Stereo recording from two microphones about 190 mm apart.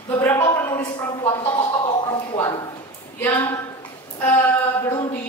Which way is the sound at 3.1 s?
10° left (ahead or behind).